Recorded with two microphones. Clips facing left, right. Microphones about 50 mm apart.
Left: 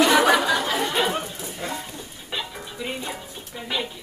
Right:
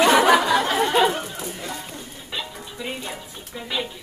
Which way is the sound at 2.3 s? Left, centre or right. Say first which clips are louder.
Left 1 dB; centre.